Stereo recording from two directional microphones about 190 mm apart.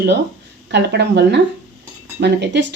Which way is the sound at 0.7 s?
65° right (ahead or behind).